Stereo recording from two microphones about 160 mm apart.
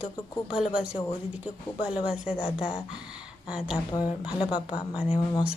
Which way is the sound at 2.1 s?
5° right (ahead or behind).